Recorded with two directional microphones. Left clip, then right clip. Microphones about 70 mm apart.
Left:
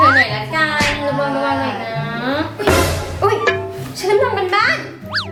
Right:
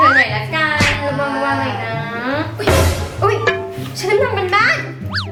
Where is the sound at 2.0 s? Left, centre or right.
Centre.